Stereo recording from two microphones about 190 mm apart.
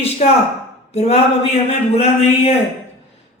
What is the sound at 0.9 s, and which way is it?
Speech, 35° left (ahead or behind).